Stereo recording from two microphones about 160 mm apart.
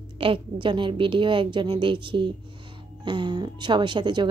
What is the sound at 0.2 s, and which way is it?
A woman's voice, 30° right (ahead or behind).